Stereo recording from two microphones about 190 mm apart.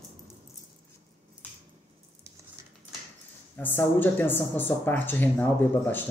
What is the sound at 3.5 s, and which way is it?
Speech, 10° left (ahead or behind).